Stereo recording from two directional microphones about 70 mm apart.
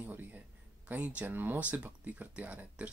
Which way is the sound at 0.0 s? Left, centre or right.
Right.